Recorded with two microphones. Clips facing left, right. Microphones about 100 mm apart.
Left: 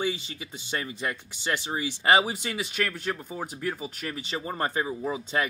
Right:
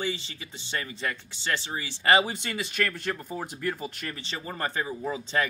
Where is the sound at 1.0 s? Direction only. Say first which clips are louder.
Left 1 dB; 15° left (ahead or behind).